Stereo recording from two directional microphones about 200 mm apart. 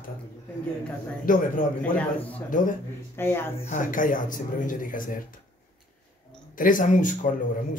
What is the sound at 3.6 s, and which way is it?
Speech, 40° left (ahead or behind).